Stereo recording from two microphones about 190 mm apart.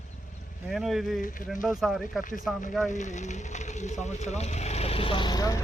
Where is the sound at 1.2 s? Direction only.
45° left (ahead or behind).